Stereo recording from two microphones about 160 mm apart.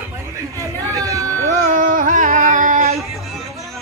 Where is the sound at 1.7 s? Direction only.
55° right (ahead or behind).